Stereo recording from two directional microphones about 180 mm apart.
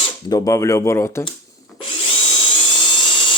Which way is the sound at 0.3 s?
20° left (ahead or behind).